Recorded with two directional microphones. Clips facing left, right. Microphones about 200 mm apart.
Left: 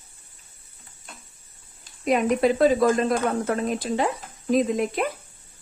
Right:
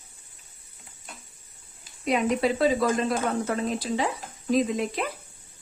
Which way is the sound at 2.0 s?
50° left (ahead or behind).